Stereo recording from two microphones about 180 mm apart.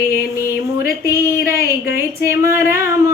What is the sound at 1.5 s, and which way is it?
Speech, 55° left (ahead or behind).